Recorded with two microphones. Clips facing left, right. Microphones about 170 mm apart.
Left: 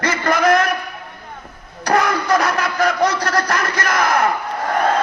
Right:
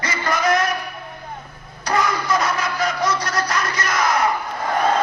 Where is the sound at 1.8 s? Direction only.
65° left (ahead or behind).